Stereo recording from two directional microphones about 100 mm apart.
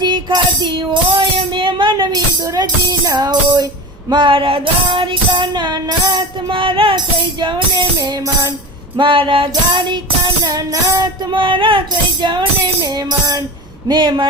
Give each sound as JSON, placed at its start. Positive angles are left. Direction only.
{"t": 0.0, "sound": "music", "side_deg": -50}
{"t": 4.1, "sound": "female singing", "side_deg": -55}
{"t": 6.5, "sound": "female singing", "side_deg": -60}
{"t": 6.9, "sound": "music", "side_deg": -50}
{"t": 7.9, "sound": "child singing", "side_deg": -35}
{"t": 9.0, "sound": "female singing", "side_deg": -55}
{"t": 10.4, "sound": "child singing", "side_deg": -35}
{"t": 11.3, "sound": "female singing", "side_deg": -55}
{"t": 12.2, "sound": "music", "side_deg": -50}
{"t": 13.8, "sound": "music", "side_deg": -50}